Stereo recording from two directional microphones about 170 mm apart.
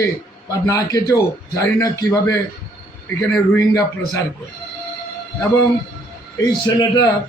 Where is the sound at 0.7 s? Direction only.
20° left (ahead or behind).